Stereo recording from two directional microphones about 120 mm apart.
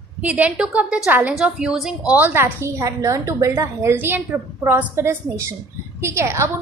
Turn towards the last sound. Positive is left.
turn(degrees=-25)  # may be behind; listen again after turning